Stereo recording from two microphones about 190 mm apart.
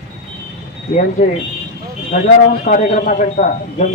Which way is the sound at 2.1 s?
45° left (ahead or behind).